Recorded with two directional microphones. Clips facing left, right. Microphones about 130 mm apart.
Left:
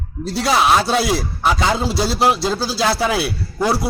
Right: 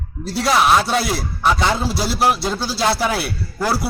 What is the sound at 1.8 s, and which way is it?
Speech, 25° left (ahead or behind).